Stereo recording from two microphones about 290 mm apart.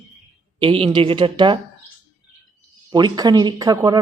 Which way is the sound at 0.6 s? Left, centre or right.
Centre.